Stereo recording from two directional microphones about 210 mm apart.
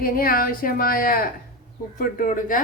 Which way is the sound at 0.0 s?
45° left (ahead or behind).